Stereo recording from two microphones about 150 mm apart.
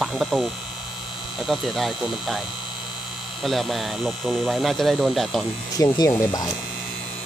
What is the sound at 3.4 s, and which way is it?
Speech, centre (ahead or behind).